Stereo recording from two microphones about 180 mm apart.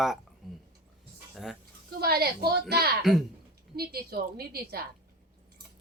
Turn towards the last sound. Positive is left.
turn(degrees=-60)  # may be behind; listen again after turning